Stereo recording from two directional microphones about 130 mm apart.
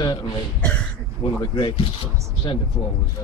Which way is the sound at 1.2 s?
35° left (ahead or behind).